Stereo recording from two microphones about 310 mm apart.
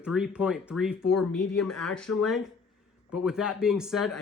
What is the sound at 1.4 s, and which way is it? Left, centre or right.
Speech, left.